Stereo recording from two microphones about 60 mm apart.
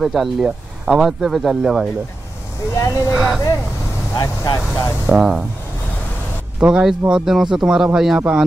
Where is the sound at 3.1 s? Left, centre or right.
Centre.